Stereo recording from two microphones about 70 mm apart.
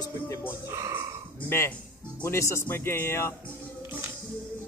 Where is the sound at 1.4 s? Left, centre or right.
Left.